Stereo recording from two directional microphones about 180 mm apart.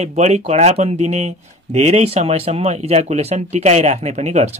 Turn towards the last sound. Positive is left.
turn(degrees=-40)  # may be behind; listen again after turning